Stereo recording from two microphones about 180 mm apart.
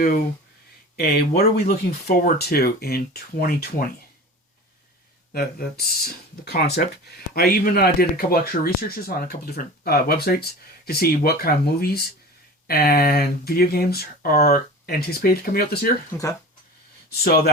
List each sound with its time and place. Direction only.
0.9 s speech: 60° left (ahead or behind)
5.3 s speech: 55° left (ahead or behind)
16.2 s speech: 15° left (ahead or behind)
17.2 s speech: 55° left (ahead or behind)